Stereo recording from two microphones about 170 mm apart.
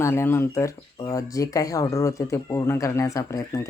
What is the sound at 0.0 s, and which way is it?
Speech, 15° left (ahead or behind).